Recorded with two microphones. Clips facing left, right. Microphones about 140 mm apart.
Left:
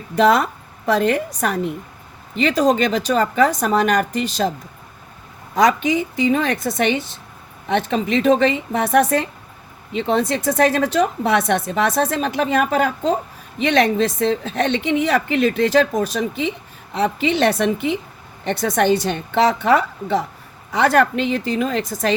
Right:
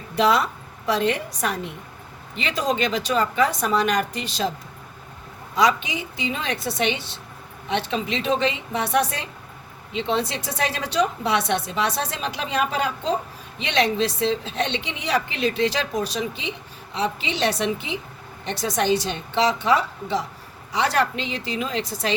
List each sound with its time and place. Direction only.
0.2 s a woman's voice: 45° left (ahead or behind)
5.5 s a woman's voice: 50° left (ahead or behind)